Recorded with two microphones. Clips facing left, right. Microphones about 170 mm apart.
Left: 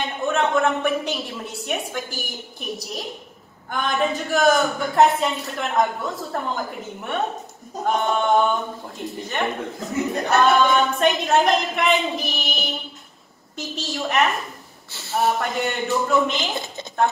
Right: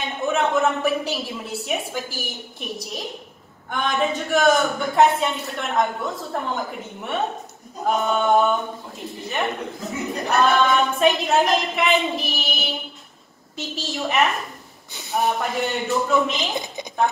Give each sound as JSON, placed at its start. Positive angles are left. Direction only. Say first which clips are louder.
{"t": 0.0, "sound": "a woman's voice", "louder": "even", "side_deg": 0}
{"t": 14.9, "sound": "a sound", "louder": "right 1 dB", "side_deg": -15}
{"t": 15.1, "sound": "a man's voice", "louder": "left 1 dB", "side_deg": 0}